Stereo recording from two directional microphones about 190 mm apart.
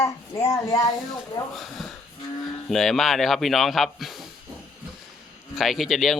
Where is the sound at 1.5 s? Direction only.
Centre (ahead or behind).